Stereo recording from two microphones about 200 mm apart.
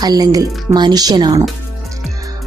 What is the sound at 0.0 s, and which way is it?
Speech, 20° right (ahead or behind).